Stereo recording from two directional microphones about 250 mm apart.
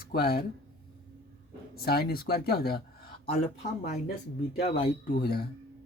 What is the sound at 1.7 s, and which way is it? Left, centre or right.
Speech, left.